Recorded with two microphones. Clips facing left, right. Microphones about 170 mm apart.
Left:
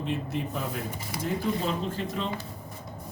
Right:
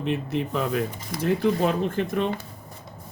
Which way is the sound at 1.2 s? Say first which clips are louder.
Right 7 dB; 60° right (ahead or behind).